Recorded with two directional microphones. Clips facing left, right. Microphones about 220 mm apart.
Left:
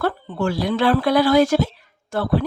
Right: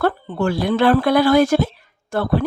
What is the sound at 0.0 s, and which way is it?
Speech, 55° right (ahead or behind).